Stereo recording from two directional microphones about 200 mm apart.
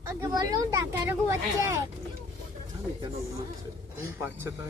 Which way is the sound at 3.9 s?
10° right (ahead or behind).